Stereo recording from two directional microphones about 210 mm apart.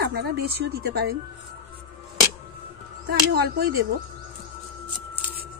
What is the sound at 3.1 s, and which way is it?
Speech, 50° right (ahead or behind).